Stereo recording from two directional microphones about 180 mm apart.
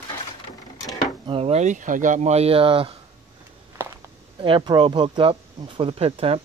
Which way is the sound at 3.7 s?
25° right (ahead or behind).